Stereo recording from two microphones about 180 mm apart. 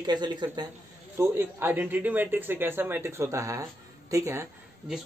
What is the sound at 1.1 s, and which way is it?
Speech, 10° right (ahead or behind).